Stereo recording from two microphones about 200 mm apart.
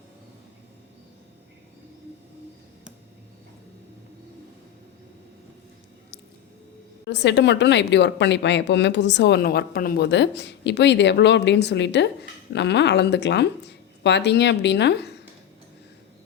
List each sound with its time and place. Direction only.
7.1 s a woman's voice: 60° left (ahead or behind)